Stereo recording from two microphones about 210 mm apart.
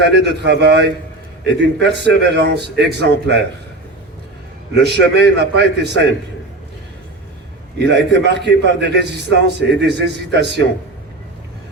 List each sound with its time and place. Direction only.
0.0 s a man's voice: 55° right (ahead or behind)
4.7 s a man's voice: 55° right (ahead or behind)
7.8 s a man's voice: 55° right (ahead or behind)